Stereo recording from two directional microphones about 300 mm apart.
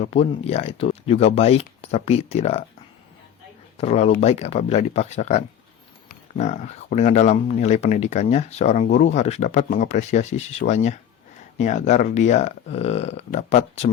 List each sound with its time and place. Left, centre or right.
0.0 s speech: left
3.8 s speech: left